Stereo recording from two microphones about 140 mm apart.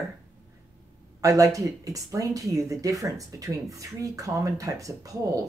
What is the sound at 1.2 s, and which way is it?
Speech, 25° right (ahead or behind).